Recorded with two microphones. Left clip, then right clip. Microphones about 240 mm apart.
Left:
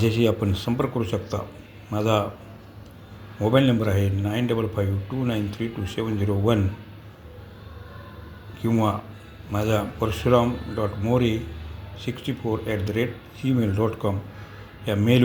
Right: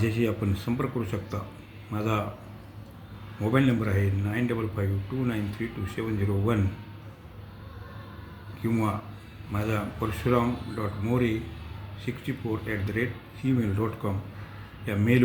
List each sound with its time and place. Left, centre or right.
0.0 s speech: left
3.4 s speech: centre
9.5 s speech: centre